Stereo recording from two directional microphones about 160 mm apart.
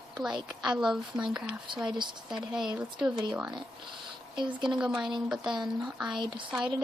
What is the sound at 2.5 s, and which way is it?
Speech, 5° right (ahead or behind).